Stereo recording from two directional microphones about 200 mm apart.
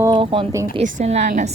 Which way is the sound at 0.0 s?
25° right (ahead or behind).